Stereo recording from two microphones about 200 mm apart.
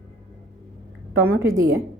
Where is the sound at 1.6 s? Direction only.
15° right (ahead or behind).